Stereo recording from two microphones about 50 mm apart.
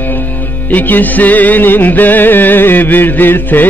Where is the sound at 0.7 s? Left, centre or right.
Left.